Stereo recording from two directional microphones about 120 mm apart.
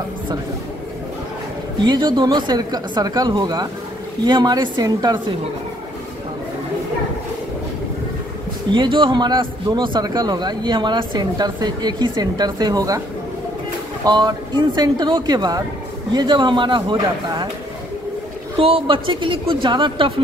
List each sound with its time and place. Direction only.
1.9 s speech: 40° right (ahead or behind)
8.7 s speech: 45° right (ahead or behind)
14.0 s speech: 35° right (ahead or behind)
18.6 s speech: 50° right (ahead or behind)